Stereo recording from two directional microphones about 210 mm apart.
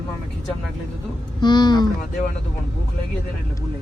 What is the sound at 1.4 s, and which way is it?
Speech, 20° left (ahead or behind).